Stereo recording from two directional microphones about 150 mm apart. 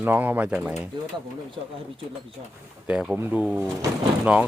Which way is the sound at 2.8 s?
5° right (ahead or behind).